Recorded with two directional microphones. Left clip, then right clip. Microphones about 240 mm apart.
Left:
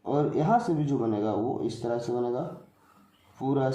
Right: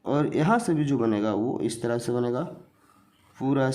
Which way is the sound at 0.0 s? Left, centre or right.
Right.